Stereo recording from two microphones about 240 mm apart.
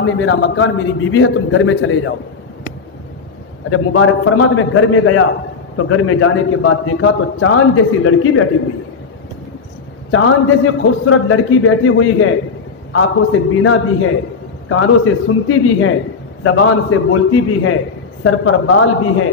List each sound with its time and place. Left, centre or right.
0.0 s a man's voice: left
3.7 s a man's voice: left
10.1 s a man's voice: left